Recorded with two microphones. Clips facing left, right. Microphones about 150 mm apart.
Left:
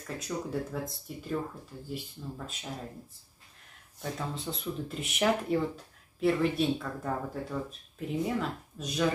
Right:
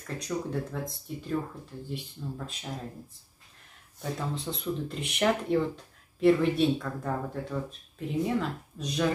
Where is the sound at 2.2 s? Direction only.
5° left (ahead or behind).